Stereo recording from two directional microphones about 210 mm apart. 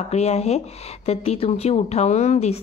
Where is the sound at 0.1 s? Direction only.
30° left (ahead or behind).